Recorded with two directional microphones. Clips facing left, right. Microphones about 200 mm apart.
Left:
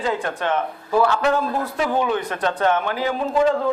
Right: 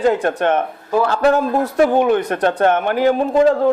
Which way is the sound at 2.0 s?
55° right (ahead or behind).